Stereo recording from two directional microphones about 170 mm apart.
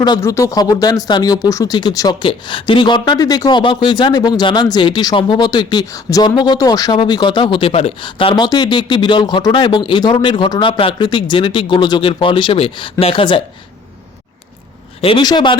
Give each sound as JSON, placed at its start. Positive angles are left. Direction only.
{"t": 0.0, "sound": "speech", "side_deg": 20}
{"t": 15.0, "sound": "speech", "side_deg": 25}